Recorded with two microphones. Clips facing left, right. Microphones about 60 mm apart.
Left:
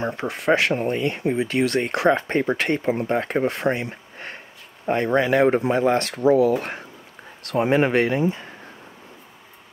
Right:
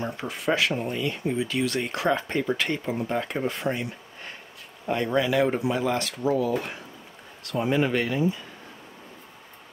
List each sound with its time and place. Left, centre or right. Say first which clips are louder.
0.2 s speech: left 5 dB; left
0.7 s speech: left 5 dB; left
3.6 s a sound: left 5 dB; left
4.8 s speech: left 4 dB; left
5.9 s speech: left 7 dB; left